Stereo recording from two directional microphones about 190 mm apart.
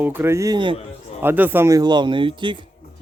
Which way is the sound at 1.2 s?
10° right (ahead or behind).